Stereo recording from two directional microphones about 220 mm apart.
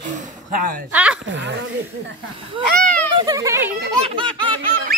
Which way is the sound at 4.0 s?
30° right (ahead or behind).